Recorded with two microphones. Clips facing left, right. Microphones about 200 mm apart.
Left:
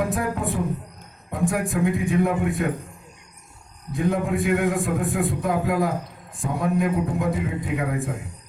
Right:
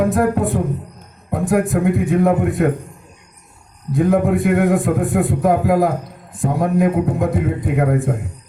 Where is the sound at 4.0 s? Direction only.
55° right (ahead or behind).